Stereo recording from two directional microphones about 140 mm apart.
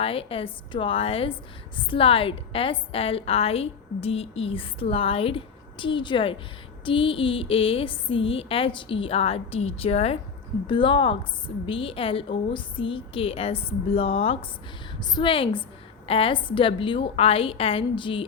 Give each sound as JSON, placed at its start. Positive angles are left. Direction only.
{"t": 0.0, "sound": "a woman's voice", "side_deg": 40}
{"t": 10.7, "sound": "a woman's voice", "side_deg": 35}